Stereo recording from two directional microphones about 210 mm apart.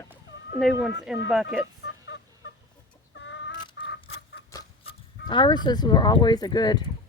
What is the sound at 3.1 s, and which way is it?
Chicken, 55° left (ahead or behind).